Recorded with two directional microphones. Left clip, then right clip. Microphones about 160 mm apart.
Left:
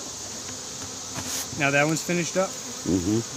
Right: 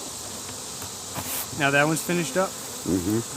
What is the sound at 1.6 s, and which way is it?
Speech, 30° left (ahead or behind).